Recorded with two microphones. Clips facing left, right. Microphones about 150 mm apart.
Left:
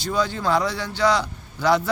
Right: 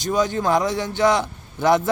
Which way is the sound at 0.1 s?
20° right (ahead or behind).